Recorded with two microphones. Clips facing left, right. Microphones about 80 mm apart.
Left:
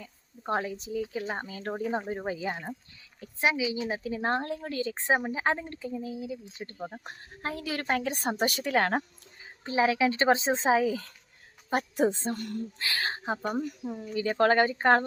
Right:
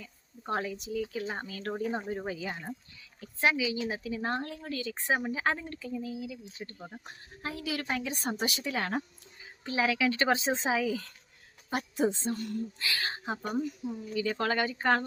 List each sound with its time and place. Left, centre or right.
0.0 s speech: left
3.3 s a woman's voice: centre
7.0 s a woman's voice: left
9.6 s a woman's voice: left
13.7 s speech: left
14.1 s a woman's voice: left